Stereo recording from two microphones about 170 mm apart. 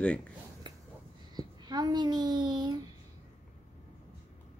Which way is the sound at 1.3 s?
25° right (ahead or behind).